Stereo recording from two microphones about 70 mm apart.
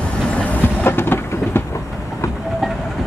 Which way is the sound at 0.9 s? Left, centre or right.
Left.